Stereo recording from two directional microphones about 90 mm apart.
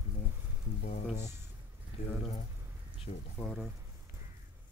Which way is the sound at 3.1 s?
90° left.